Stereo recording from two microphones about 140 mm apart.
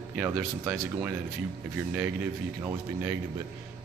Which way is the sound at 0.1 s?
10° right (ahead or behind).